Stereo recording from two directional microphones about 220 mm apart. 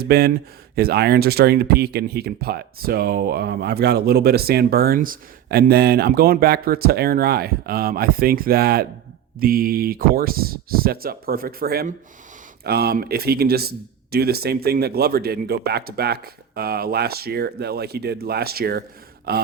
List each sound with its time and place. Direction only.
0.0 s speech: 45° right (ahead or behind)